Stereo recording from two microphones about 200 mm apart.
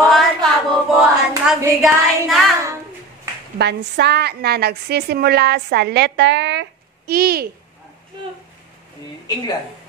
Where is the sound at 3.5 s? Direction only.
55° right (ahead or behind).